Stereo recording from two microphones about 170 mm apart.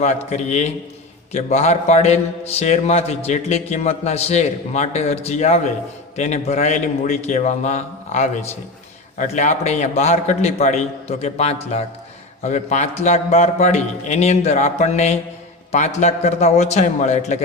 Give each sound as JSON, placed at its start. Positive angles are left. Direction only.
{"t": 0.3, "sound": "a man's voice", "side_deg": 40}